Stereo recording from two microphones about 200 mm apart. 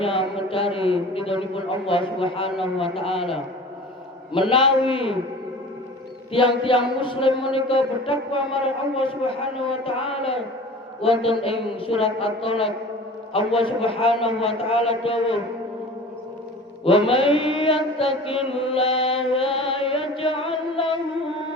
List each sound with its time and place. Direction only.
0.0 s speech: 25° left (ahead or behind)
4.4 s speech: 25° left (ahead or behind)
6.3 s speech: 25° left (ahead or behind)
16.8 s speech: 30° left (ahead or behind)
18.5 s mantra: 30° left (ahead or behind)